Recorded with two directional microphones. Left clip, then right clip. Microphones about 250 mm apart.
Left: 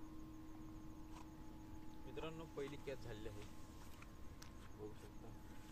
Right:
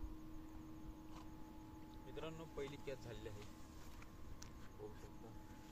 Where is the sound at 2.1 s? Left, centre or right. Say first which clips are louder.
Left 1 dB; centre.